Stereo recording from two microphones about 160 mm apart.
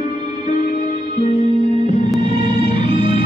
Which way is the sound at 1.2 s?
50° left (ahead or behind).